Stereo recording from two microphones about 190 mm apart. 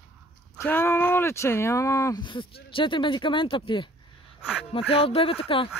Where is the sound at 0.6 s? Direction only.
10° left (ahead or behind); by 5.7 s 30° left (ahead or behind).